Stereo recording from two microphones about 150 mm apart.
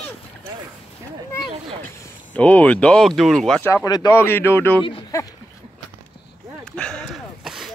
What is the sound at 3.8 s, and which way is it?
Speech, 25° left (ahead or behind).